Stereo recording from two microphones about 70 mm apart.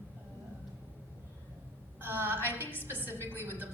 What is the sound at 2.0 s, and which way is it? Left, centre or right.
A woman's voice, right.